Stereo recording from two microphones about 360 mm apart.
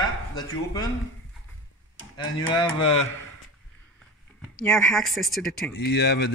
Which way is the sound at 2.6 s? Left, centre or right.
Centre.